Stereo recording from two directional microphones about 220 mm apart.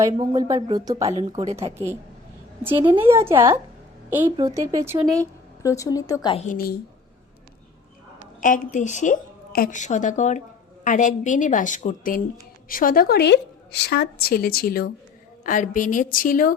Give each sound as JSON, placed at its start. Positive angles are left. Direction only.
{"t": 0.0, "sound": "a woman's voice", "side_deg": -15}
{"t": 2.6, "sound": "a woman's voice", "side_deg": -25}
{"t": 3.0, "sound": "a woman's voice", "side_deg": -10}
{"t": 5.2, "sound": "a woman's voice", "side_deg": 15}
{"t": 6.3, "sound": "a woman's voice", "side_deg": 35}
{"t": 8.4, "sound": "a woman's voice", "side_deg": 35}